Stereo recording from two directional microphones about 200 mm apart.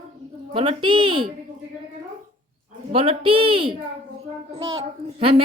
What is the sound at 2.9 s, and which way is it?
A child's voice, 30° right (ahead or behind).